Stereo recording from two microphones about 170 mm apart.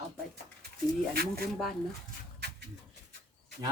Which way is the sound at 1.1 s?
65° right (ahead or behind).